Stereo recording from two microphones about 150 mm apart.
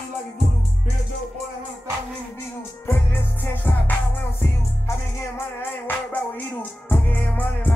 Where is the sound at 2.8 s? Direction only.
15° left (ahead or behind).